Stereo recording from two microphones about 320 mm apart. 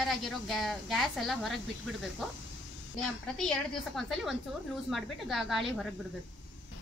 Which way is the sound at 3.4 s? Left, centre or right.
Centre.